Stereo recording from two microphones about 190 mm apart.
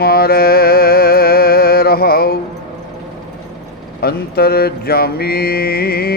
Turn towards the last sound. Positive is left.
turn(degrees=55)  # may be behind; listen again after turning